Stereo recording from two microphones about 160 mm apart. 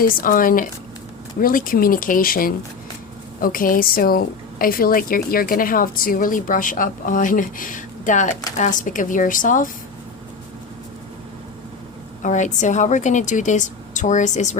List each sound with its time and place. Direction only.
0.0 s a woman's voice: 60° left (ahead or behind)
12.2 s a woman's voice: 50° left (ahead or behind)